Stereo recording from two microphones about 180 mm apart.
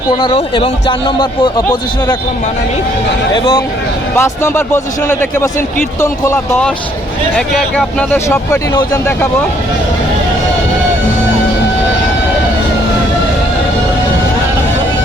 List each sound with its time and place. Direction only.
0.2 s speech: 25° left (ahead or behind)
3.3 s speech: 25° left (ahead or behind)
4.2 s a man's voice: 15° left (ahead or behind)